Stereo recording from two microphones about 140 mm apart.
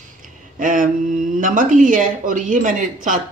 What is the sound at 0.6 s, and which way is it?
Speech, 70° right (ahead or behind).